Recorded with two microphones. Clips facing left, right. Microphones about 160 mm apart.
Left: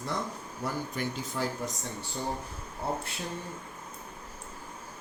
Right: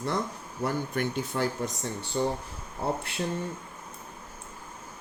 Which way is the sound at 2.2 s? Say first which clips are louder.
Right 8 dB; 80° right.